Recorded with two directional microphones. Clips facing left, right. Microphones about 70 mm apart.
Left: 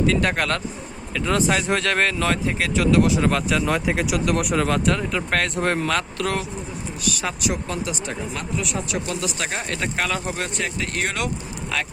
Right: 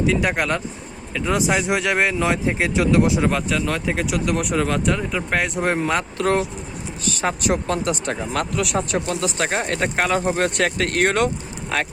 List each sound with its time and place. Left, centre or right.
0.0 s speech: centre; by 3.2 s right
3.2 s speech: centre
3.7 s speech: centre; by 6.2 s right
6.2 s speech: right
8.9 s speech: right
10.5 s speech: right
11.7 s speech: right